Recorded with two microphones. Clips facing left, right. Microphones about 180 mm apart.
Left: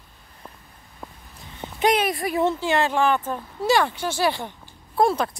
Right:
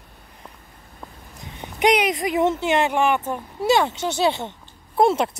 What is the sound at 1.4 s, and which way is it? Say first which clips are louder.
Speech: right 2 dB; 15° right (ahead or behind).